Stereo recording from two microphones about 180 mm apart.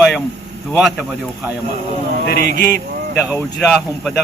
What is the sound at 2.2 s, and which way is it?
Speech, 65° left (ahead or behind).